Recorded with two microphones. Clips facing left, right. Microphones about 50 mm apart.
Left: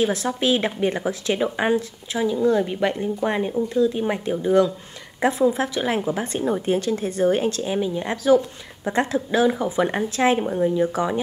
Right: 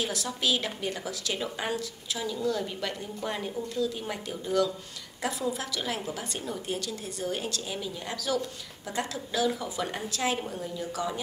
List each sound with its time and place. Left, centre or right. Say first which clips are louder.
0.0 s a woman's voice: left 9 dB; left